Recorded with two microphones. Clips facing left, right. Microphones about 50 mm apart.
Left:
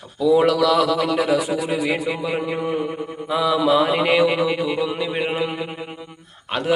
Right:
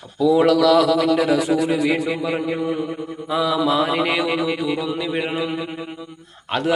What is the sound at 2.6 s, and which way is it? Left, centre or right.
Mantra, left.